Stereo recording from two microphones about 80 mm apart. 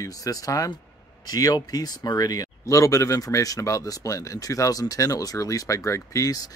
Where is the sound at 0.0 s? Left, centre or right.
Left.